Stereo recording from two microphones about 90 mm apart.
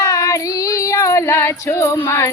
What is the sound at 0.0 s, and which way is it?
Female singing, 35° left (ahead or behind).